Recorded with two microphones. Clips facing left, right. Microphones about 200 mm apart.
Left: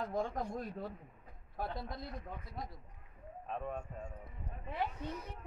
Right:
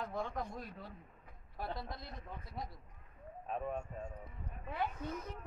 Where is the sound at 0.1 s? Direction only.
45° left (ahead or behind).